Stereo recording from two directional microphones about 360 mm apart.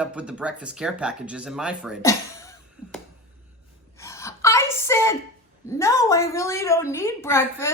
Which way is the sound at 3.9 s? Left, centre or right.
Centre.